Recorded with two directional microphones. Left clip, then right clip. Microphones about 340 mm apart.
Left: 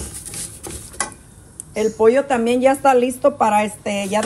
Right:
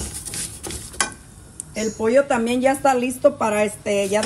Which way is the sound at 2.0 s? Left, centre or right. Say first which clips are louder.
Left 1 dB; centre.